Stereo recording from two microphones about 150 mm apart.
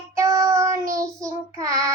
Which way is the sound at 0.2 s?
20° right (ahead or behind).